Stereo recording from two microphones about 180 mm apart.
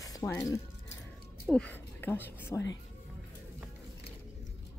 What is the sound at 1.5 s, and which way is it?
Speech, 5° left (ahead or behind).